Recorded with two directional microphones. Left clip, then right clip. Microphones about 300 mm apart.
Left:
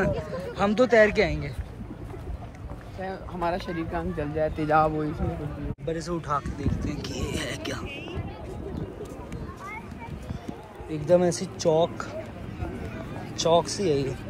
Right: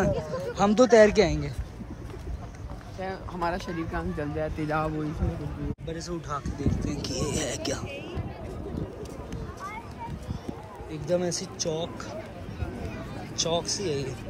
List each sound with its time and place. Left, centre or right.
0.3 s speech: centre
3.0 s speech: centre
10.9 s speech: centre
13.4 s speech: centre